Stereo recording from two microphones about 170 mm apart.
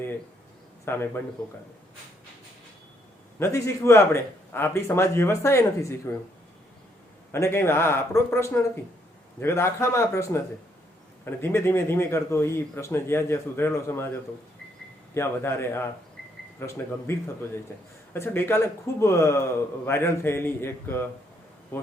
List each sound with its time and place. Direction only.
0.9 s a man's voice: 15° left (ahead or behind)
3.3 s a man's voice: 15° left (ahead or behind)
7.3 s a man's voice: 15° left (ahead or behind)